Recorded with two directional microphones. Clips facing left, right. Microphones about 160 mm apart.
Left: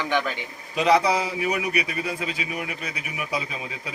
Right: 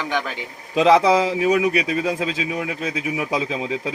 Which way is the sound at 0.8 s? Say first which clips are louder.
Right 5 dB; 90° right.